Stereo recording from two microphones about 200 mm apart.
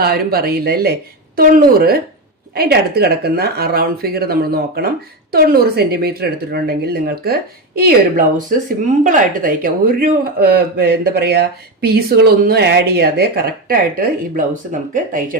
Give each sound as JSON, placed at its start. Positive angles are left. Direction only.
{"t": 0.0, "sound": "a man's voice", "side_deg": -50}